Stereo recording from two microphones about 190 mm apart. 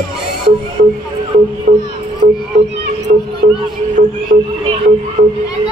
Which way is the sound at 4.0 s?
45° right (ahead or behind).